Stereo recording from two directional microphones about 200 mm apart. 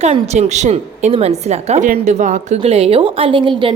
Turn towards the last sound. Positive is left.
turn(degrees=-25)  # may be behind; listen again after turning